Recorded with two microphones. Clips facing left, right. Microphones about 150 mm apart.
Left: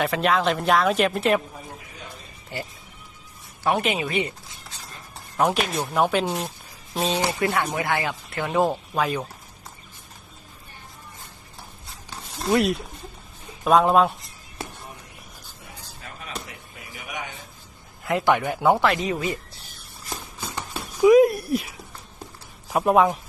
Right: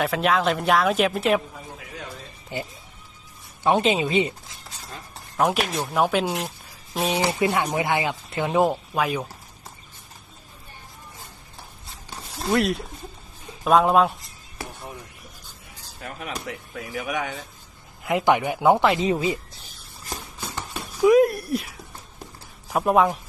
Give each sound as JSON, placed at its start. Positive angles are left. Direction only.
{"t": 0.0, "sound": "speech", "side_deg": 0}
{"t": 2.5, "sound": "speech", "side_deg": -20}
{"t": 5.1, "sound": "speech", "side_deg": 0}
{"t": 7.3, "sound": "speech", "side_deg": -20}
{"t": 12.4, "sound": "speech", "side_deg": 0}
{"t": 16.0, "sound": "a sound", "side_deg": -45}
{"t": 16.5, "sound": "speech", "side_deg": -90}
{"t": 18.1, "sound": "speech", "side_deg": -15}
{"t": 21.0, "sound": "a sound", "side_deg": 0}
{"t": 22.7, "sound": "speech", "side_deg": 0}